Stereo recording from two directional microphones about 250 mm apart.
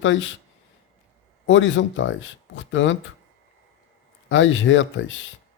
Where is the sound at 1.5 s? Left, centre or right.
Left.